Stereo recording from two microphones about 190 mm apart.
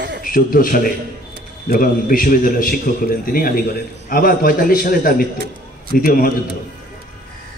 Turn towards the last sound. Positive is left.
turn(degrees=50)  # may be behind; listen again after turning